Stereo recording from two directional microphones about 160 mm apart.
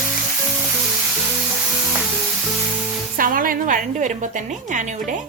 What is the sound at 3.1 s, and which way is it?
Music, 60° right (ahead or behind).